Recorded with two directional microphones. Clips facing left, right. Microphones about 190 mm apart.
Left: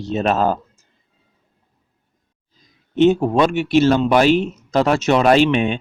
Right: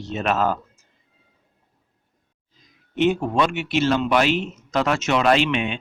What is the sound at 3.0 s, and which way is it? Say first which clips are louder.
Speech: left 6 dB; 30° left (ahead or behind).